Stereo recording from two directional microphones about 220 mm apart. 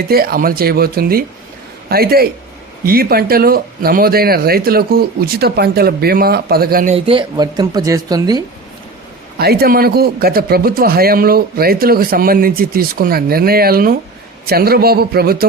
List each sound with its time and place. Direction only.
0.1 s speech: 45° right (ahead or behind)
6.9 s speech: 25° right (ahead or behind)
9.4 s speech: 45° right (ahead or behind)